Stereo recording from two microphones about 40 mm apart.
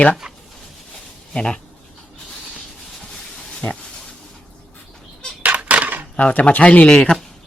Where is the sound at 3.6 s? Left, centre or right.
Left.